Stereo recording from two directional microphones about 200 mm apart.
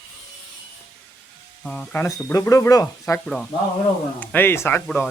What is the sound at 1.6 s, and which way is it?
Speech, 5° left (ahead or behind).